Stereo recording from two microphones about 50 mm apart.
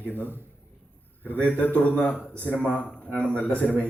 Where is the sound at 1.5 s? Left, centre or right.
Left.